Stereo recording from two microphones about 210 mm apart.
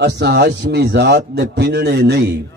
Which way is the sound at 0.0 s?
55° right (ahead or behind).